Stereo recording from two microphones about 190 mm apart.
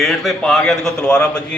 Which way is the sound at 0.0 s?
Centre (ahead or behind).